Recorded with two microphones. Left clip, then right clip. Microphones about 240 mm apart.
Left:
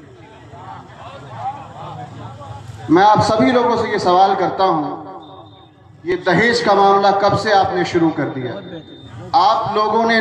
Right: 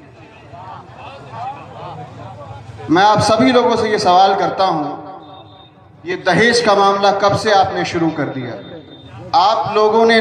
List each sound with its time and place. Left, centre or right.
2.9 s a man's voice: right
6.0 s a man's voice: right